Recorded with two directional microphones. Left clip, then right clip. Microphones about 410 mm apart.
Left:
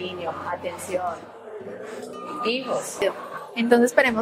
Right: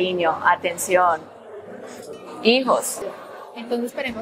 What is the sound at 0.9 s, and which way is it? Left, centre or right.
Speech, right.